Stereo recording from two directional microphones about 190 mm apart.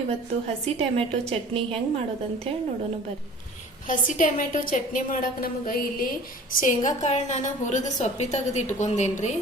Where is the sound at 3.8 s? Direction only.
45° left (ahead or behind).